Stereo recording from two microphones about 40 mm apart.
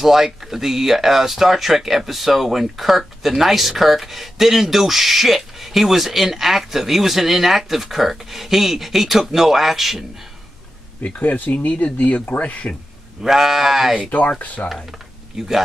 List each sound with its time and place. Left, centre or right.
0.0 s speech: centre
11.1 s speech: left
13.2 s sheep: centre
14.4 s speech: left
15.3 s speech: centre